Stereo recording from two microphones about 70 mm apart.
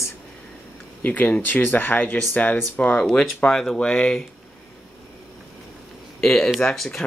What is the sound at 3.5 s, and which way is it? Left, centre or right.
Speech, centre.